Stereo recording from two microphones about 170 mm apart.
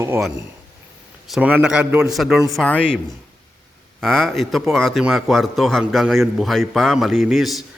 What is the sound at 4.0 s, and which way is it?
Speech, centre (ahead or behind).